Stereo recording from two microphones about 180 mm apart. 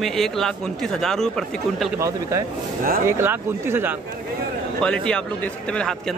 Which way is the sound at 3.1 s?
15° right (ahead or behind).